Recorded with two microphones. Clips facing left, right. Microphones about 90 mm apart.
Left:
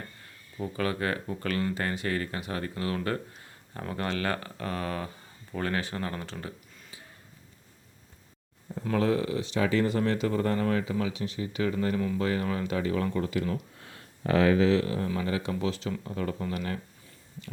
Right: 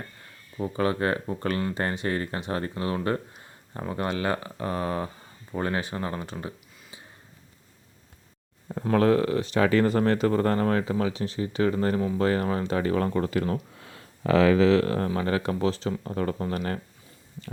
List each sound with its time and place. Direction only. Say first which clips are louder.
0.5 s speech: right 4 dB; 30° right (ahead or behind)
8.8 s speech: right 5 dB; 50° right (ahead or behind)
14.3 s speech: right 3 dB; 80° right; by 16.8 s 45° right (ahead or behind)